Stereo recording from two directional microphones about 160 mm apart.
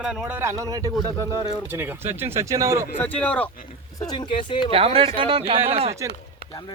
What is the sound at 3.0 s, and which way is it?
Speech, 10° left (ahead or behind).